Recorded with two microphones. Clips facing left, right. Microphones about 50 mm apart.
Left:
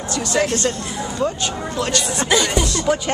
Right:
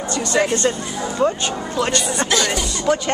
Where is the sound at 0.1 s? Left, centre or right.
Centre.